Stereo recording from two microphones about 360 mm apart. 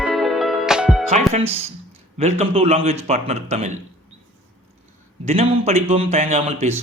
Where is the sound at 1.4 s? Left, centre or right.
Centre.